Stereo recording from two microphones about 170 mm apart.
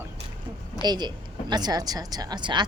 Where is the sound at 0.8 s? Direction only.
25° right (ahead or behind).